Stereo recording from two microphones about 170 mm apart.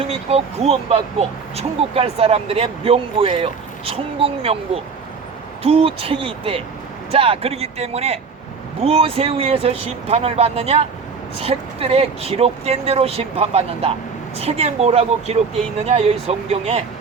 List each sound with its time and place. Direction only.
0.0 s speech: 35° right (ahead or behind)